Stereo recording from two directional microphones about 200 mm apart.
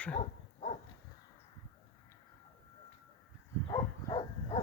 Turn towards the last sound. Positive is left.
turn(degrees=25)  # may be behind; listen again after turning